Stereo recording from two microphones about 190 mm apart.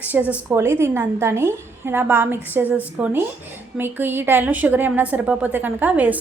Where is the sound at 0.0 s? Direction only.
10° right (ahead or behind).